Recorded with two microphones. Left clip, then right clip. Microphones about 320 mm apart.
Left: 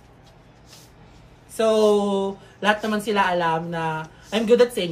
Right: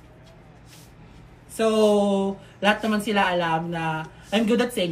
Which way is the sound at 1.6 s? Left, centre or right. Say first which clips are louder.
Left 2 dB; centre.